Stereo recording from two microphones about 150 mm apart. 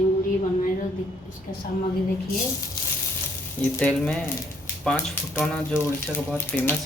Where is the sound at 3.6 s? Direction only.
10° left (ahead or behind).